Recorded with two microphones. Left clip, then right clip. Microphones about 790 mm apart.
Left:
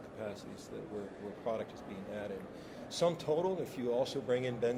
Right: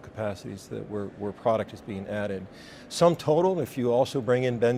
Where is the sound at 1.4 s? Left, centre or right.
Right.